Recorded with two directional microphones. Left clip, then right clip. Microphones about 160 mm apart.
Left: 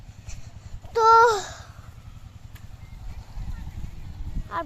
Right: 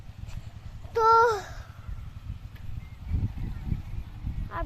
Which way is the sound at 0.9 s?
20° left (ahead or behind).